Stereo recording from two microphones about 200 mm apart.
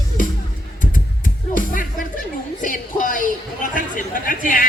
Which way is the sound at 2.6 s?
40° left (ahead or behind).